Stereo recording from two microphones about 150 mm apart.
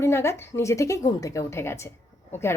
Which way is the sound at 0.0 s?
15° left (ahead or behind).